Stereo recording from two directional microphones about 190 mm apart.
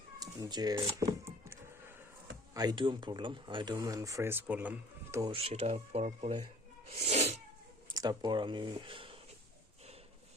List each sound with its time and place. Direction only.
0.2 s speech: 20° right (ahead or behind)
5.2 s speech: 30° right (ahead or behind)
6.9 s cat: 35° right (ahead or behind)
7.9 s speech: 20° right (ahead or behind)